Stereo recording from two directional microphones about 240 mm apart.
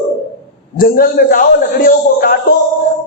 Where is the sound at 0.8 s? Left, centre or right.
Left.